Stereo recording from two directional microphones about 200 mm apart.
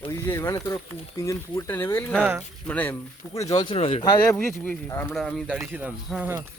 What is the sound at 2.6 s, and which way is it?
Speech, 10° left (ahead or behind).